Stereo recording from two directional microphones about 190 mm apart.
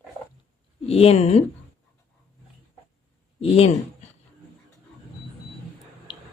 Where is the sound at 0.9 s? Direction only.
30° left (ahead or behind).